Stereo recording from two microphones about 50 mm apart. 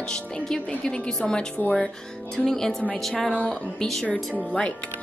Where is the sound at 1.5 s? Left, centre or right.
Left.